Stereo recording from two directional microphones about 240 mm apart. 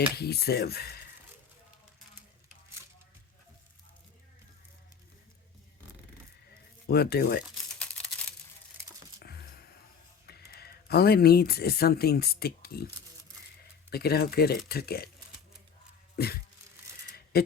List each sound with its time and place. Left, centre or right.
0.2 s speech: left
6.8 s speech: left
9.1 s a sound: left
10.2 s speech: left
13.9 s speech: left
16.1 s a sound: left
17.3 s speech: left